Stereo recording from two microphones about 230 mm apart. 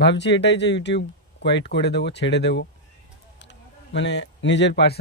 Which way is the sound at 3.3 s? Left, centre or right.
Left.